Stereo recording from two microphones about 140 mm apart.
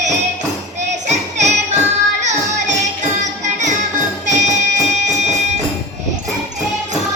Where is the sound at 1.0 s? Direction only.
55° right (ahead or behind).